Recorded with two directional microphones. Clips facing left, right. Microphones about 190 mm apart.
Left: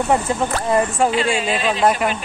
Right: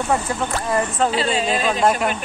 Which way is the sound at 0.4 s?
25° left (ahead or behind).